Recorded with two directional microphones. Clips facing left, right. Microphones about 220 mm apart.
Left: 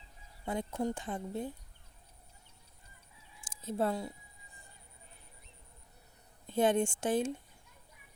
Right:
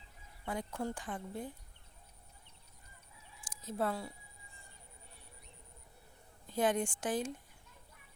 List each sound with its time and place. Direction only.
0.4 s speech: 20° left (ahead or behind)
3.4 s speech: 25° left (ahead or behind)
6.5 s speech: 25° left (ahead or behind)